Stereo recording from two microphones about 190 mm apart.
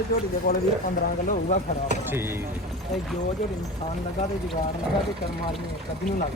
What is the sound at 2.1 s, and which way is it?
Speech, 10° right (ahead or behind).